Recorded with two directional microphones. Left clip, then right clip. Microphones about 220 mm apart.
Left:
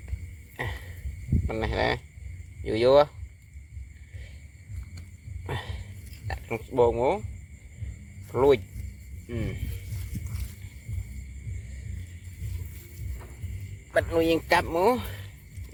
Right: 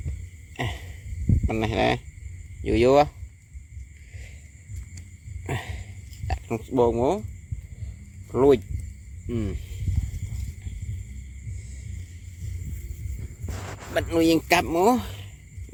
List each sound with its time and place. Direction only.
1.5 s a man's voice: 55° right (ahead or behind)
5.5 s a sound: 55° right (ahead or behind)
6.7 s speech: 50° right (ahead or behind)
8.3 s a man's voice: 50° right (ahead or behind)
13.9 s a man's voice: 55° right (ahead or behind)